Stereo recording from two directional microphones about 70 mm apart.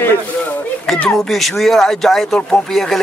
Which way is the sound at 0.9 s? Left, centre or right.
Centre.